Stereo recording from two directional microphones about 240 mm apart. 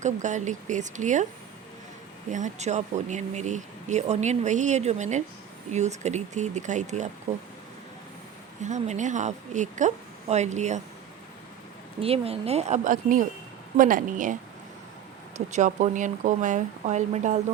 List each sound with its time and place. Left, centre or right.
0.0 s a woman's voice: right
2.3 s speech: right
8.6 s a woman's voice: right
11.9 s a woman's voice: right
15.5 s a woman's voice: right